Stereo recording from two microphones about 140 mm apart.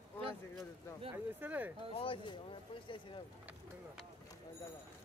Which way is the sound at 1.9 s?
40° left (ahead or behind).